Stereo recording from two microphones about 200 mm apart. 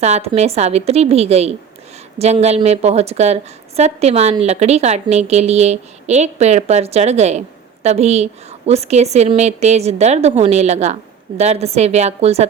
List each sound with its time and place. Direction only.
0.0 s a woman's voice: 35° right (ahead or behind)